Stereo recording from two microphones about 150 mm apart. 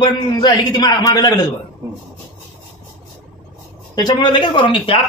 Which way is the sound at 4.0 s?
30° left (ahead or behind).